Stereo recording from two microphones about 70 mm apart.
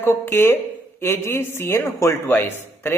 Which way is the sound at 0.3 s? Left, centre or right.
Left.